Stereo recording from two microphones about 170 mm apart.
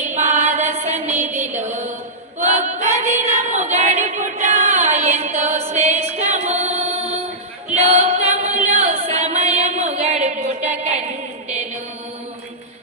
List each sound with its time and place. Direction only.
0.0 s music: 40° right (ahead or behind)
1.4 s mantra: 45° right (ahead or behind)
2.4 s female singing: 40° right (ahead or behind)
5.7 s music: 40° right (ahead or behind)